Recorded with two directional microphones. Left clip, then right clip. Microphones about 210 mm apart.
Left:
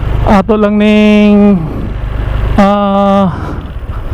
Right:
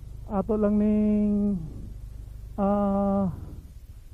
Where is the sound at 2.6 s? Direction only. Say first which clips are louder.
Left 16 dB; 10° left (ahead or behind).